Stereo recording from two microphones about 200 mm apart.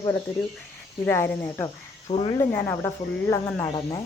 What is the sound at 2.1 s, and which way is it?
Speech, 30° left (ahead or behind).